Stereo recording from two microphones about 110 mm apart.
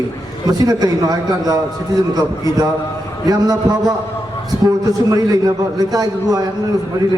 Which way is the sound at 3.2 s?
35° right (ahead or behind).